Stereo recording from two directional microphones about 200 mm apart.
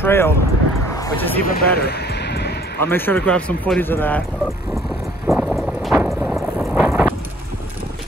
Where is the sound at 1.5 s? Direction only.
50° left (ahead or behind).